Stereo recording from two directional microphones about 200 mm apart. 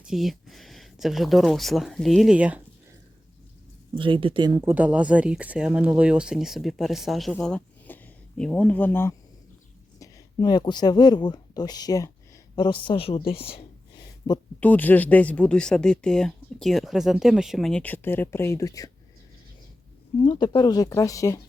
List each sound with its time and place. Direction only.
0.0 s speech: centre (ahead or behind)
3.9 s speech: 25° right (ahead or behind)
4.7 s speech: 5° right (ahead or behind); by 14.4 s 20° left (ahead or behind)
14.6 s speech: 10° left (ahead or behind)
20.2 s speech: 25° left (ahead or behind)